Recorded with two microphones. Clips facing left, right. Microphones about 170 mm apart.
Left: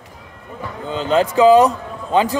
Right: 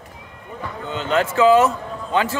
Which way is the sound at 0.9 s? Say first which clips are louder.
Left 4 dB; 30° left (ahead or behind).